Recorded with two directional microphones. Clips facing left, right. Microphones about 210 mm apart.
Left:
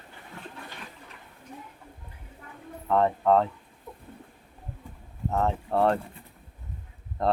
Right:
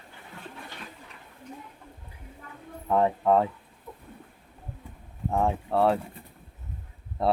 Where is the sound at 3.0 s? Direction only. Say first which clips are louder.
Even; 10° right (ahead or behind).